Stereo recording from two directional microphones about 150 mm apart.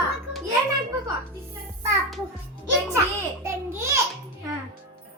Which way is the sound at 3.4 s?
15° right (ahead or behind).